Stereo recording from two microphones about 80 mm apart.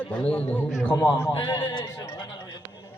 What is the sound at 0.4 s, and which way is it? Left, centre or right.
Speech, left.